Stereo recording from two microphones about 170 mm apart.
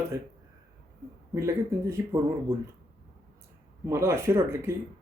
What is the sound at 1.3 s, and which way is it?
Speech, 15° right (ahead or behind).